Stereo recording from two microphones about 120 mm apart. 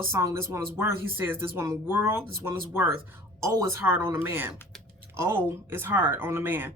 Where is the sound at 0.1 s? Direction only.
25° right (ahead or behind).